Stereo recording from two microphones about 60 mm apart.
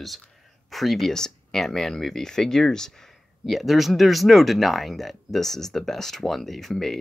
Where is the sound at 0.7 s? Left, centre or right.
Centre.